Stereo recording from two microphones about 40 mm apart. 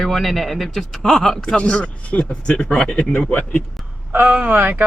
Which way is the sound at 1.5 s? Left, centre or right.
Left.